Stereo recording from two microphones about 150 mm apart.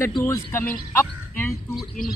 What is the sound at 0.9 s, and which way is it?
Fowl, 10° left (ahead or behind).